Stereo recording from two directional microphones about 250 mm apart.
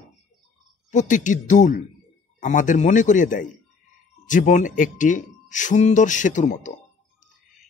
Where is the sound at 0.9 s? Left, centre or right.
Left.